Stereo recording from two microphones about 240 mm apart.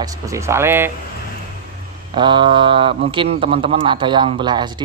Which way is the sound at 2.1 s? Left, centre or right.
Centre.